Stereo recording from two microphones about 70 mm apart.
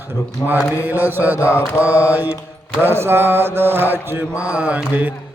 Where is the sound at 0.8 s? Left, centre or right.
Right.